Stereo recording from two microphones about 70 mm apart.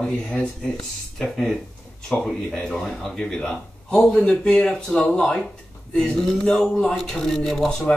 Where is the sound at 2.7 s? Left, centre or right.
Centre.